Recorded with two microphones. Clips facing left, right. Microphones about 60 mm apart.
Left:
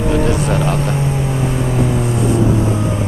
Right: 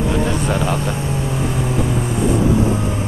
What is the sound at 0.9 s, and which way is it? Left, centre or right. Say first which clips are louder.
Music: left 3 dB; left.